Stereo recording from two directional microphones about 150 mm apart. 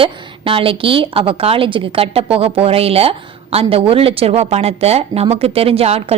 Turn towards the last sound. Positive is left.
turn(degrees=-40)  # may be behind; listen again after turning